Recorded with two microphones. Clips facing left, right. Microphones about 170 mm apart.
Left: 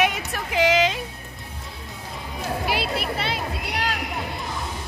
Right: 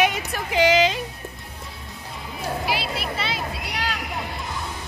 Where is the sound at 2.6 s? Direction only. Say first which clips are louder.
Left 4 dB; 55° left (ahead or behind).